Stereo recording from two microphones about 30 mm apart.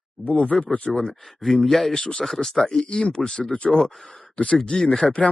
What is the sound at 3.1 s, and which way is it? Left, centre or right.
Speech, left.